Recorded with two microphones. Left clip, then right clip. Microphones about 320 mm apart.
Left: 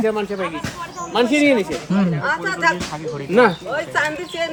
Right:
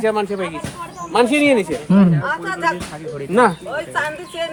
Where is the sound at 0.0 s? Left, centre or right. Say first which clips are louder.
Right 2 dB; right.